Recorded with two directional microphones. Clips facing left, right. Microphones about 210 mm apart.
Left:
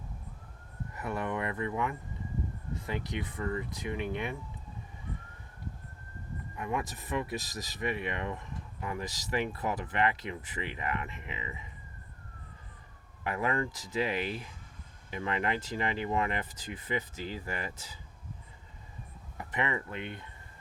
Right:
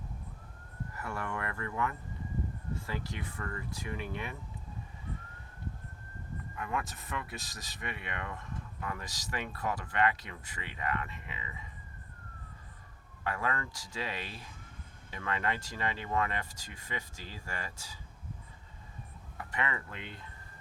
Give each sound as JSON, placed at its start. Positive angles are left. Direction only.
{"t": 0.9, "sound": "speech", "side_deg": 20}
{"t": 6.6, "sound": "speech", "side_deg": 20}
{"t": 13.2, "sound": "speech", "side_deg": 20}
{"t": 19.4, "sound": "speech", "side_deg": 20}